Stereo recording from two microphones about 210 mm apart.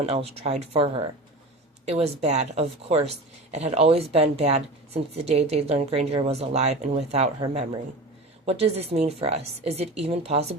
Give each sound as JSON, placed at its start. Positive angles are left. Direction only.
{"t": 0.0, "sound": "speech", "side_deg": -30}